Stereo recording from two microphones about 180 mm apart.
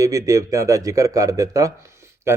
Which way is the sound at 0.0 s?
15° right (ahead or behind).